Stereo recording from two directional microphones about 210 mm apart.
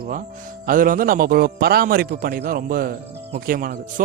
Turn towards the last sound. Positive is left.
turn(degrees=-40)  # may be behind; listen again after turning